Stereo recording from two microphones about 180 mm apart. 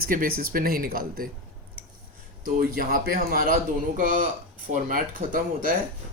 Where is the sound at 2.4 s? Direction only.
50° right (ahead or behind).